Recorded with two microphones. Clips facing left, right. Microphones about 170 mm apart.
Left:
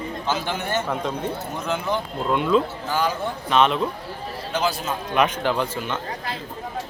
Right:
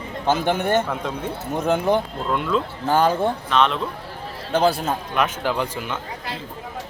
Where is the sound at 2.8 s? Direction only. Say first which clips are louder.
Right 6 dB; 55° right (ahead or behind).